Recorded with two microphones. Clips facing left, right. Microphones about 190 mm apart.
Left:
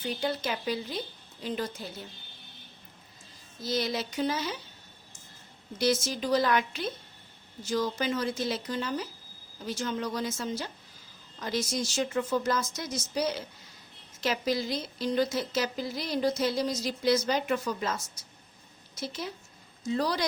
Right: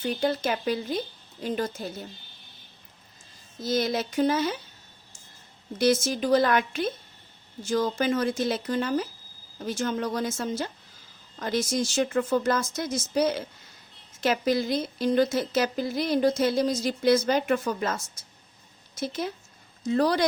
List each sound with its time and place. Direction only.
0.0 s speech: 50° right (ahead or behind)
3.6 s speech: 50° right (ahead or behind)
5.8 s a woman's voice: 50° right (ahead or behind)